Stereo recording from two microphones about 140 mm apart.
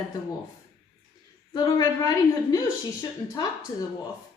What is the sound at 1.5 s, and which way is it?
A woman's voice, 30° left (ahead or behind).